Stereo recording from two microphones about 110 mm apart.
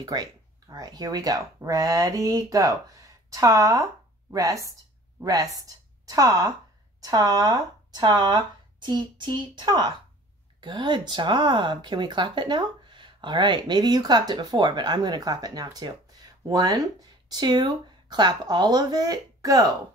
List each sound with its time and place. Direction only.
0.0 s a woman's voice: 35° right (ahead or behind)